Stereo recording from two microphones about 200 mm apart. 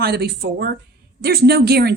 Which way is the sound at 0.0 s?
55° right (ahead or behind).